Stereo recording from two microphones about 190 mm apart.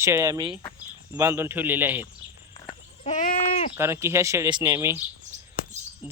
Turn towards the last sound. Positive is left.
turn(degrees=-10)  # may be behind; listen again after turning